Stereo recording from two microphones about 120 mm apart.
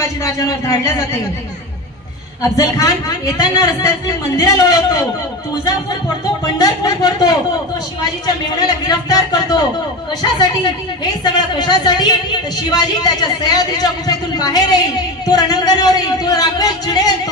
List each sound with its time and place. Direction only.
0.2 s a man's voice: 30° left (ahead or behind)
2.5 s a man's voice: 30° left (ahead or behind)
6.4 s a man's voice: 30° left (ahead or behind)
8.5 s a man's voice: 35° left (ahead or behind)
11.5 s a man's voice: 35° left (ahead or behind)